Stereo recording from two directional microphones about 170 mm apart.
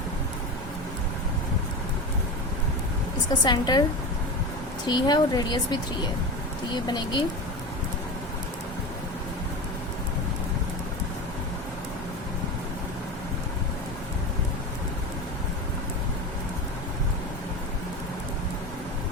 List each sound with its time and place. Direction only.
3.4 s speech: 25° left (ahead or behind)
4.9 s speech: 25° left (ahead or behind)